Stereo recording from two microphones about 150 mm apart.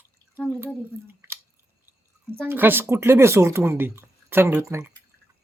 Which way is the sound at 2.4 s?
15° right (ahead or behind).